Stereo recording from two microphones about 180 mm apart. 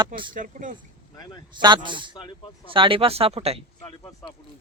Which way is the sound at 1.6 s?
25° right (ahead or behind).